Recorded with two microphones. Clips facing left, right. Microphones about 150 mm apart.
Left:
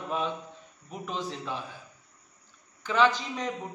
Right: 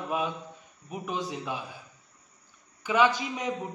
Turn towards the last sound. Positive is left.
turn(degrees=-10)  # may be behind; listen again after turning